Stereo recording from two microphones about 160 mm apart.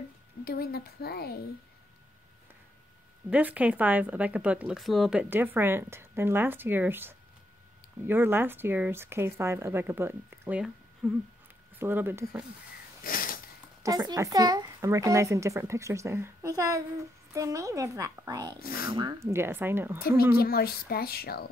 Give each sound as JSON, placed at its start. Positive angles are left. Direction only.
{"t": 0.5, "sound": "speech", "side_deg": 75}
{"t": 3.3, "sound": "speech", "side_deg": -10}
{"t": 5.3, "sound": "speech", "side_deg": -10}
{"t": 11.0, "sound": "a sound", "side_deg": 0}
{"t": 11.8, "sound": "speech", "side_deg": -15}
{"t": 13.0, "sound": "a sound", "side_deg": 65}
{"t": 13.8, "sound": "speech", "side_deg": -20}
{"t": 20.0, "sound": "speech", "side_deg": 75}